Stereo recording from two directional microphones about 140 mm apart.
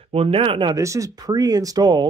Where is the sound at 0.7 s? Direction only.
25° right (ahead or behind).